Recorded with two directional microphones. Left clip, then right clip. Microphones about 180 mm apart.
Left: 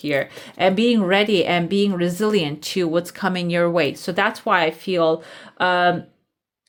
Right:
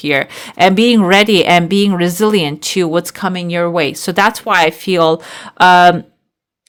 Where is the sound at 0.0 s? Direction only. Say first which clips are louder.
Right 7 dB; 35° right (ahead or behind); by 3.9 s 20° right (ahead or behind).